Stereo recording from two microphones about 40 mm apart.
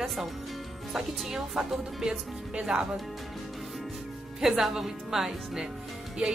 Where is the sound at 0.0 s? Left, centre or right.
Centre.